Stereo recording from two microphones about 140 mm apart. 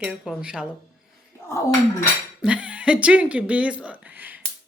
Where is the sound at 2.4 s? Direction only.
5° right (ahead or behind).